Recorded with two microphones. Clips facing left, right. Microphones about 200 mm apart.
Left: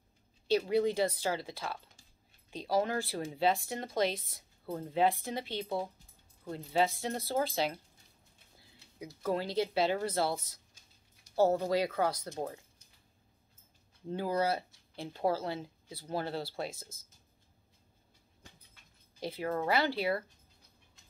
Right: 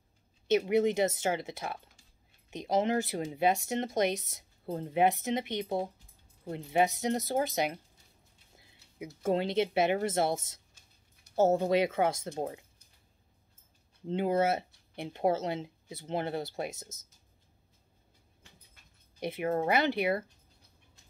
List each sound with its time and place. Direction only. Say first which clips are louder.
0.5 s speech: right 3 dB; 20° right (ahead or behind)
14.0 s speech: right 4 dB; 25° right (ahead or behind)
19.1 s speech: right 4 dB; 20° right (ahead or behind)